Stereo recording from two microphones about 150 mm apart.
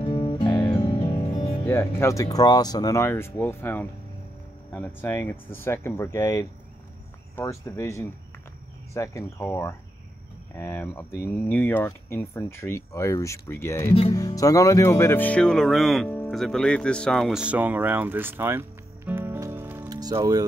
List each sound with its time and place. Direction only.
0.0 s music: 35° left (ahead or behind)
1.7 s speech: 15° left (ahead or behind); by 19.9 s 15° right (ahead or behind)
19.9 s speech: 25° right (ahead or behind)